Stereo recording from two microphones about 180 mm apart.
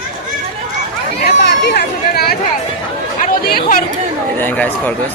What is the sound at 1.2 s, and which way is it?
Speech, 65° left (ahead or behind).